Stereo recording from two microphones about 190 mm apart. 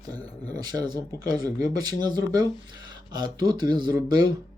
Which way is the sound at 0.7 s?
20° right (ahead or behind).